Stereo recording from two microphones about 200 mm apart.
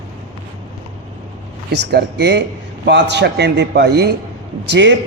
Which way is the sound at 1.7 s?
55° right (ahead or behind).